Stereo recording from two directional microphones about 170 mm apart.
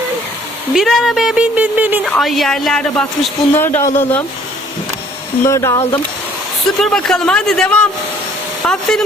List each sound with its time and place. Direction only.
0.7 s a woman's voice: centre (ahead or behind)
2.0 s a woman's voice: centre (ahead or behind)
5.5 s speech: 15° left (ahead or behind)
6.7 s a woman's voice: centre (ahead or behind)